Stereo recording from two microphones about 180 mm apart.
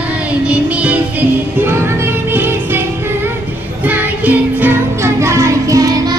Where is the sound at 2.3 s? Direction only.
10° right (ahead or behind).